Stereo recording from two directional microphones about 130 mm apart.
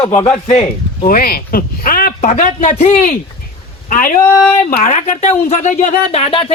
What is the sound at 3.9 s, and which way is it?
Speech, 90° left.